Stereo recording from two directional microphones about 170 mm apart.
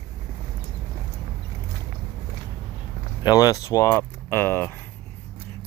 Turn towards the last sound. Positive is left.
turn(degrees=15)  # may be behind; listen again after turning